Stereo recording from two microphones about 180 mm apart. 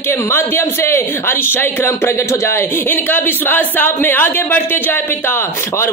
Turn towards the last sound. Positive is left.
turn(degrees=15)  # may be behind; listen again after turning